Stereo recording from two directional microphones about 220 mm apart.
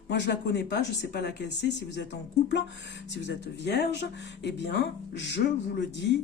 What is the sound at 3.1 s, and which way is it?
Speech, 50° left (ahead or behind).